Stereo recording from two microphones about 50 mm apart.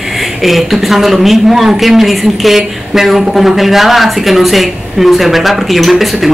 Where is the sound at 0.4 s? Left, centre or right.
Centre.